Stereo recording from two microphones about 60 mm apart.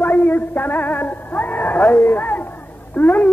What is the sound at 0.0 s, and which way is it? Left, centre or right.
A man's voice, left.